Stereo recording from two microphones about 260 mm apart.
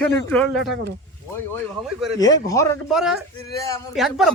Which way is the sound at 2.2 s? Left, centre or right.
Centre.